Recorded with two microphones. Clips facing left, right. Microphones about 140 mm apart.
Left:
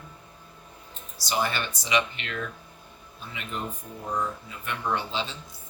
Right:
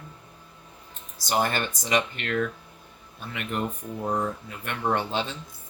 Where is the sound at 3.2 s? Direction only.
60° right (ahead or behind).